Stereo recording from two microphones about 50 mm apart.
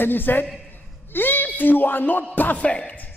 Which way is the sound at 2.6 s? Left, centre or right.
Left.